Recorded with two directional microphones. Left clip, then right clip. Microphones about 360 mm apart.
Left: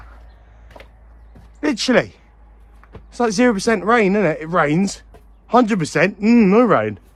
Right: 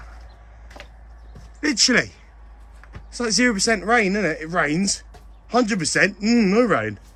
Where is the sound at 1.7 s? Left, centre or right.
Centre.